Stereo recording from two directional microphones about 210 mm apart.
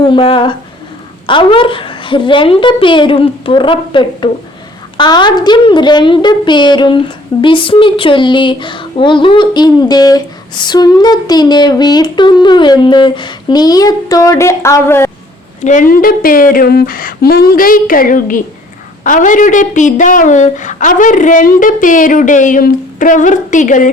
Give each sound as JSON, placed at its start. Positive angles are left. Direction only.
{"t": 0.0, "sound": "speech", "side_deg": 25}
{"t": 15.6, "sound": "a woman's voice", "side_deg": 40}